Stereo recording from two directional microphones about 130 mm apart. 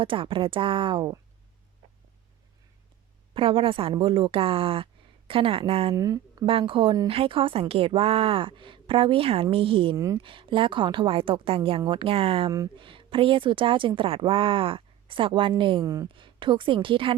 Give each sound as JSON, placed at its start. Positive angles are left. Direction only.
{"t": 0.0, "sound": "a woman's voice", "side_deg": -40}
{"t": 3.3, "sound": "a woman's voice", "side_deg": -45}
{"t": 5.9, "sound": "speech", "side_deg": -25}
{"t": 6.4, "sound": "a woman's voice", "side_deg": -45}
{"t": 9.9, "sound": "speech", "side_deg": -25}
{"t": 10.2, "sound": "a woman's voice", "side_deg": -40}
{"t": 12.5, "sound": "speech", "side_deg": -25}
{"t": 12.7, "sound": "a woman's voice", "side_deg": -40}
{"t": 15.8, "sound": "speech", "side_deg": -25}
{"t": 16.1, "sound": "a woman's voice", "side_deg": -40}